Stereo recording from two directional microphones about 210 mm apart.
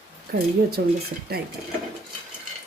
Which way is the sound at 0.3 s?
45° right (ahead or behind).